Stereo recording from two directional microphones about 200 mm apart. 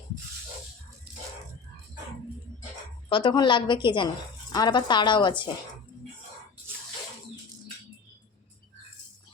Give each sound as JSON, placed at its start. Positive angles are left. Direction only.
{"t": 3.1, "sound": "a woman's voice", "side_deg": 25}